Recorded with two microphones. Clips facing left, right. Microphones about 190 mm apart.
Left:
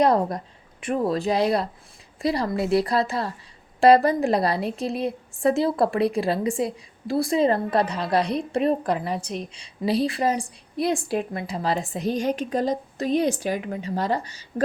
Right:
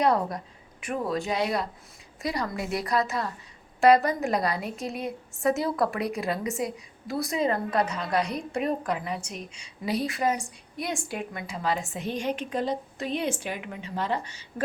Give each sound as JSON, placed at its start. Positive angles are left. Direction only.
{"t": 0.0, "sound": "a woman's voice", "side_deg": 35}